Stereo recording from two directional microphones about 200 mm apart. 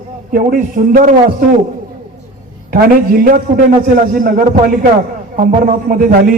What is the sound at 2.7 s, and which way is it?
A man's voice, 45° right (ahead or behind).